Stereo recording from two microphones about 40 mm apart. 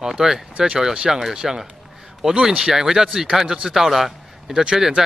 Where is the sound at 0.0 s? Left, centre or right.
Centre.